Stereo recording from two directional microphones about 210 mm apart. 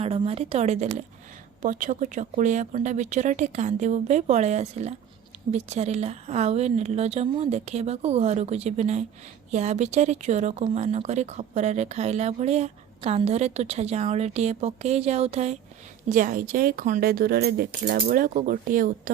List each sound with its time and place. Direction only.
0.0 s a woman's voice: 30° right (ahead or behind)